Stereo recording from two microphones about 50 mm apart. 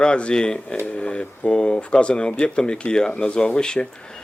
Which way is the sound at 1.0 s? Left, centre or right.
Centre.